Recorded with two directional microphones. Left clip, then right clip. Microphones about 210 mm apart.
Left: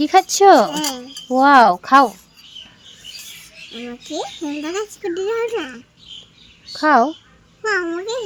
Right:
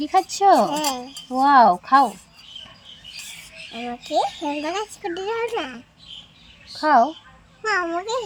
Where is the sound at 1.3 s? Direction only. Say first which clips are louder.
Left 3 dB; 50° left (ahead or behind).